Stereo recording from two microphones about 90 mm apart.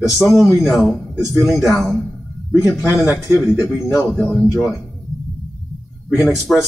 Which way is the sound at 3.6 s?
40° left (ahead or behind).